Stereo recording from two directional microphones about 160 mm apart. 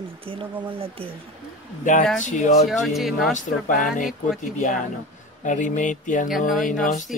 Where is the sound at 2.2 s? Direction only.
50° left (ahead or behind).